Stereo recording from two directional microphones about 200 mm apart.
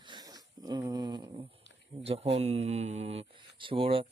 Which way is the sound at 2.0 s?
30° right (ahead or behind).